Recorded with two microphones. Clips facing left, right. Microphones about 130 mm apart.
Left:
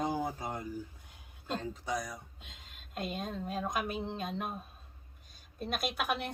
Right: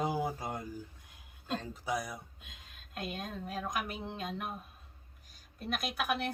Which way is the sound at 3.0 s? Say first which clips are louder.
Left 3 dB; 25° left (ahead or behind).